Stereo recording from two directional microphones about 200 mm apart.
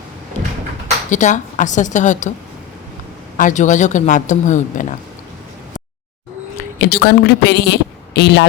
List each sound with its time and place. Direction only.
1.1 s speech: 40° left (ahead or behind)
3.3 s speech: 40° left (ahead or behind)
6.7 s a woman's voice: 55° left (ahead or behind)